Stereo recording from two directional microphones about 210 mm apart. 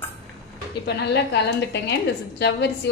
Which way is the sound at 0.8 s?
55° left (ahead or behind).